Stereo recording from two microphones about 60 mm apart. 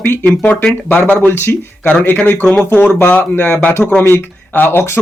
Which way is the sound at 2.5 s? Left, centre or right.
Left.